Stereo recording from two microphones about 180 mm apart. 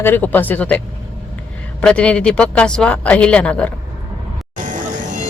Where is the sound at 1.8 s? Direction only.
5° left (ahead or behind).